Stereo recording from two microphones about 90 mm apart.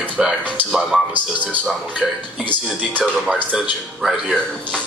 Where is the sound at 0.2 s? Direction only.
5° right (ahead or behind).